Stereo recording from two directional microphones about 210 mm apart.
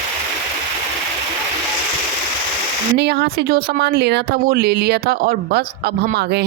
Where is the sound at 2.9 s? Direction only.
50° right (ahead or behind).